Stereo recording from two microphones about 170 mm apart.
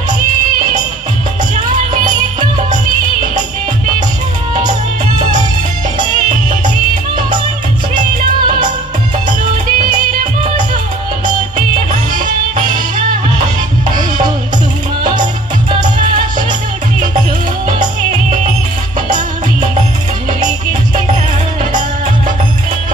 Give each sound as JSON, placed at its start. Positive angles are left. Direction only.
{"t": 7.9, "sound": "music", "side_deg": -55}
{"t": 9.7, "sound": "music", "side_deg": -55}
{"t": 11.5, "sound": "music", "side_deg": -50}